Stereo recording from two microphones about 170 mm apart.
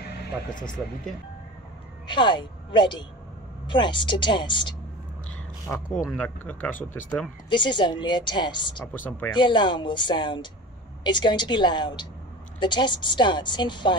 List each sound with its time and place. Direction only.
2.0 s a woman's voice: 30° left (ahead or behind)
5.7 s speech: 10° left (ahead or behind)
7.4 s a woman's voice: 25° left (ahead or behind)